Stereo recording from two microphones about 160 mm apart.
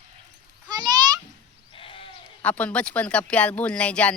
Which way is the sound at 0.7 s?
25° right (ahead or behind).